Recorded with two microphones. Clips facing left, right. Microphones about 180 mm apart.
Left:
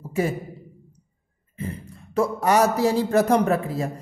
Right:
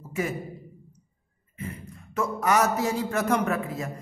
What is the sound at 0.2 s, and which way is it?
Speech, 30° left (ahead or behind).